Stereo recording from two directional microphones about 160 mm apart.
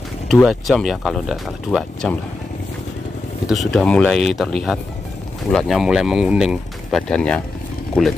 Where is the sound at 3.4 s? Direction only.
Centre (ahead or behind).